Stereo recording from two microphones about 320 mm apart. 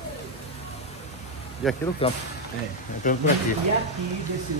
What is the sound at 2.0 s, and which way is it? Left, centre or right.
Speech, centre.